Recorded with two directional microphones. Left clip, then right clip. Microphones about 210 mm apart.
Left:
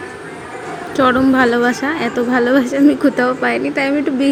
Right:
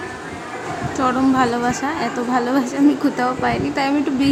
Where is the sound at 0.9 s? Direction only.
15° left (ahead or behind).